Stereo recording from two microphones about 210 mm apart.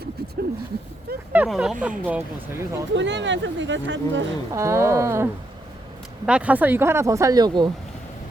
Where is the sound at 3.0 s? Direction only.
60° right (ahead or behind).